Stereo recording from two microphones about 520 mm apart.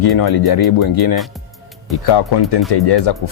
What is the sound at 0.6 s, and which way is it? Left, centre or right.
Speech, left.